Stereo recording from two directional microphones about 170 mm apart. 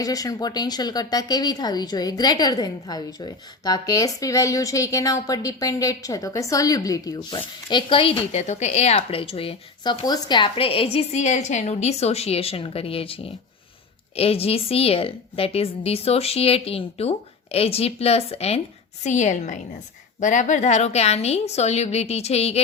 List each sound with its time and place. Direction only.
0.0 s a woman's voice: 20° left (ahead or behind); by 22.6 s 35° left (ahead or behind)